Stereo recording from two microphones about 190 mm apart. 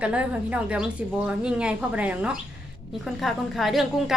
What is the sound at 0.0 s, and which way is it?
A woman's voice, 5° right (ahead or behind).